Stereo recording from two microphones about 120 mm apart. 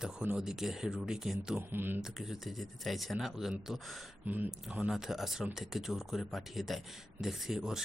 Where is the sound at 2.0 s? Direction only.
Centre (ahead or behind).